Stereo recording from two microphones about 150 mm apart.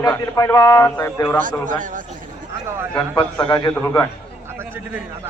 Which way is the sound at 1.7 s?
60° right (ahead or behind).